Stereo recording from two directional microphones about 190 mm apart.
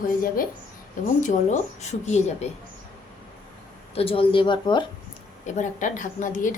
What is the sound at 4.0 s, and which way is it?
Speech, 30° left (ahead or behind).